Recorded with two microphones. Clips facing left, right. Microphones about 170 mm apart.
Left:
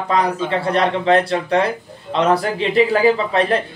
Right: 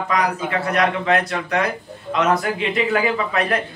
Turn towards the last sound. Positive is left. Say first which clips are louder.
# left 5 dB
turn(degrees=30)  # may be behind; listen again after turning